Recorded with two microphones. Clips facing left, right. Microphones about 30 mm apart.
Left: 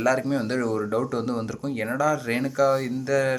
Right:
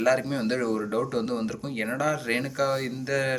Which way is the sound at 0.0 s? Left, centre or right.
Right.